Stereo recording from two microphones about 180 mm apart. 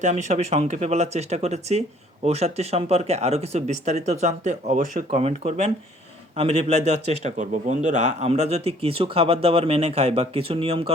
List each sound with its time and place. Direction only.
0.0 s speech: 40° right (ahead or behind)